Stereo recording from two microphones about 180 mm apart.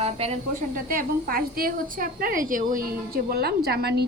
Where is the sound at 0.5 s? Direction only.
50° right (ahead or behind).